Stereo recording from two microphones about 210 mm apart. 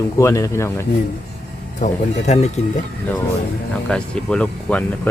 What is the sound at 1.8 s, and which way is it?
Speech, 35° left (ahead or behind).